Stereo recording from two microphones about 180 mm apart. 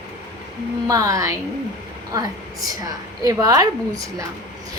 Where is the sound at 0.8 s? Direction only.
20° right (ahead or behind).